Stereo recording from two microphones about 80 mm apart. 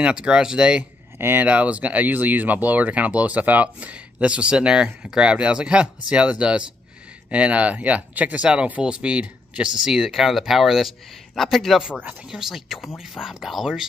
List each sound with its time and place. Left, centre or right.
0.0 s speech: centre
1.1 s a sound: right
1.4 s speech: centre